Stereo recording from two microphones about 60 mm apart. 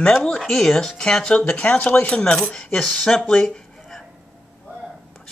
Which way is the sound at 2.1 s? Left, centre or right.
Centre.